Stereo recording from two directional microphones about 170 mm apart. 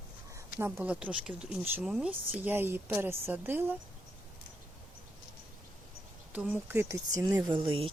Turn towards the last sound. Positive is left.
turn(degrees=-30)  # may be behind; listen again after turning